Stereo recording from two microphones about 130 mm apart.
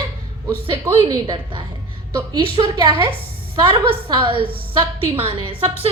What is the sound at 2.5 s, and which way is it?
A woman's voice, 40° right (ahead or behind).